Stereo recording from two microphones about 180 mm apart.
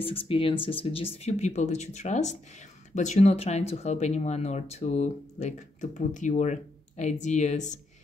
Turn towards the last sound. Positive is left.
turn(degrees=40)  # may be behind; listen again after turning